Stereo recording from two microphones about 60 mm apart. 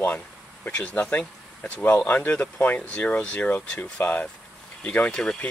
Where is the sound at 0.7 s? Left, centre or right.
Left.